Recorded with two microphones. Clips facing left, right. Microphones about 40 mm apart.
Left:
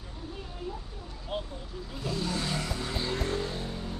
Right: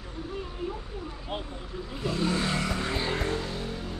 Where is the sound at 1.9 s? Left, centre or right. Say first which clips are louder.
Right 5 dB; right.